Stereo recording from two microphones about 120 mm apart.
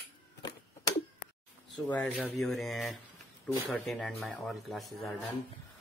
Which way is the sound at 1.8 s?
10° left (ahead or behind).